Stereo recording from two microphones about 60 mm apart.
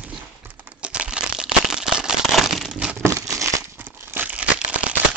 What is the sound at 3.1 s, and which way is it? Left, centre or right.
Crumpling, right.